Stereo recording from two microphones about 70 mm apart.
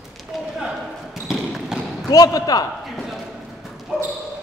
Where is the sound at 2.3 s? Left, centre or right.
Left.